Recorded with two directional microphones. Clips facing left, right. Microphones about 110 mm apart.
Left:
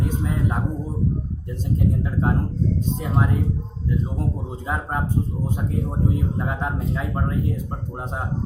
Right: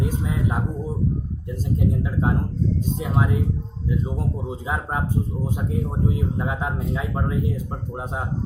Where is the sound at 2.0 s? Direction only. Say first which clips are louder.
Even; 10° right (ahead or behind).